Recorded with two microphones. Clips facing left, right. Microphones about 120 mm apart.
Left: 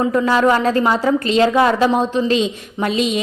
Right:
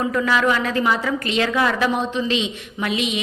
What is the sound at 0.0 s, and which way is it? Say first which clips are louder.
A woman's voice: left 5 dB; 30° left (ahead or behind).